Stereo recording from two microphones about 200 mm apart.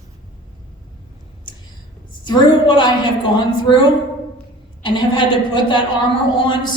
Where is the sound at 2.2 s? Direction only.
25° left (ahead or behind).